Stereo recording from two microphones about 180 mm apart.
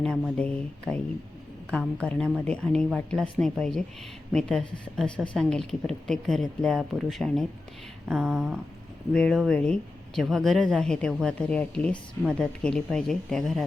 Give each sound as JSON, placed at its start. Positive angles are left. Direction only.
{"t": 0.0, "sound": "a woman's voice", "side_deg": 5}
{"t": 2.0, "sound": "a woman's voice", "side_deg": 5}